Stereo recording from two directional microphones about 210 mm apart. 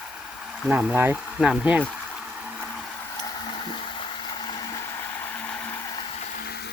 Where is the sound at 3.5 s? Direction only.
25° left (ahead or behind).